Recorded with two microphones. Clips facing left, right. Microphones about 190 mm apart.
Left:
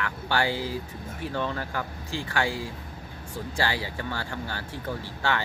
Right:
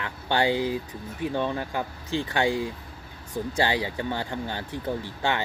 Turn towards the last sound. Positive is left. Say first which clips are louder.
# right 2 dB
turn(degrees=-20)  # may be behind; listen again after turning